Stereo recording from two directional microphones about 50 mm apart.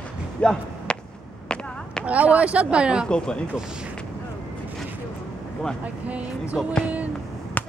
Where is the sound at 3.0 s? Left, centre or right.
Centre.